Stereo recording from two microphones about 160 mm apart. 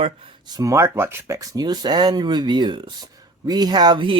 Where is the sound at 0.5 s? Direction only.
20° right (ahead or behind).